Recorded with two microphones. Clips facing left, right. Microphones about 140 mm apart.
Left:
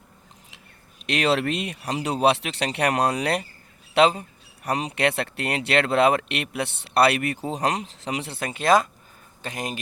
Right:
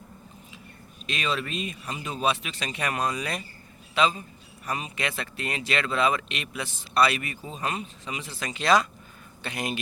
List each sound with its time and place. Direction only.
0.5 s speech: 75° left (ahead or behind); by 9.8 s 40° left (ahead or behind)